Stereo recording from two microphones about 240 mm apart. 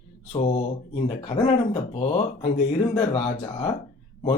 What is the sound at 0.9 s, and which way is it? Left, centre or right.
Speech, left.